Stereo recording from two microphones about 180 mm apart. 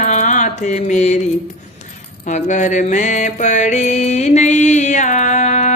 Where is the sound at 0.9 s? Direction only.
40° left (ahead or behind).